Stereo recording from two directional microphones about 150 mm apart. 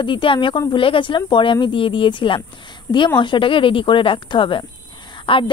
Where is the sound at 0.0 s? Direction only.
35° left (ahead or behind).